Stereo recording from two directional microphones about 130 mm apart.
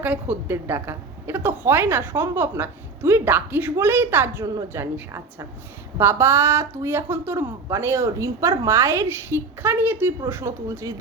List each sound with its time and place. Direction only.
0.0 s a woman's voice: 10° right (ahead or behind)